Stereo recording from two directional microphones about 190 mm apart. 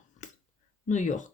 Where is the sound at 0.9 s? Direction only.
40° left (ahead or behind).